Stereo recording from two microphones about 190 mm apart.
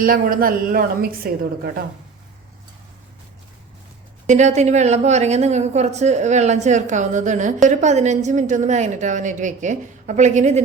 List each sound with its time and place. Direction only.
0.0 s a woman's voice: 50° right (ahead or behind)
4.3 s a woman's voice: 40° right (ahead or behind)